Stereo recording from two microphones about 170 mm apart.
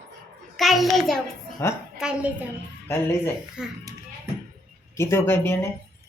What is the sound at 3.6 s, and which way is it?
Speech, 5° right (ahead or behind).